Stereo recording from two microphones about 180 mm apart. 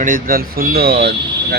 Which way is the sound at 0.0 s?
50° right (ahead or behind).